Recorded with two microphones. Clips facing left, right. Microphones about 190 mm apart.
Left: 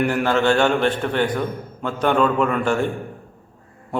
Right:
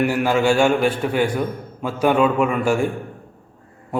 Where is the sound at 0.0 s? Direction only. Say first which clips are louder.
Right 1 dB; 10° right (ahead or behind).